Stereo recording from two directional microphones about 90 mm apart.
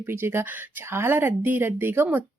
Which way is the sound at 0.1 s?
25° right (ahead or behind).